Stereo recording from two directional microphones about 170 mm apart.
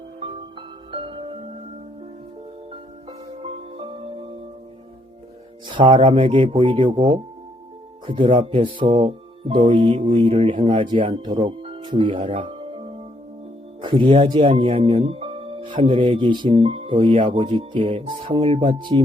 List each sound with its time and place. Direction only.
0.9 s music: 30° right (ahead or behind)
3.1 s music: 30° right (ahead or behind)
5.6 s speech: 30° right (ahead or behind)